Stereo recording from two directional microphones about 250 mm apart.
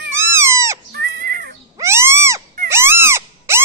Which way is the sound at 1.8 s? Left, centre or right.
Centre.